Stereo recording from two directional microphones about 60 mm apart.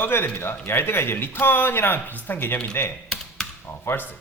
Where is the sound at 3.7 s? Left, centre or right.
Left.